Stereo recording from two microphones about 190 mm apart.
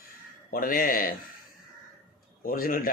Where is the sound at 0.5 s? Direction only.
50° left (ahead or behind).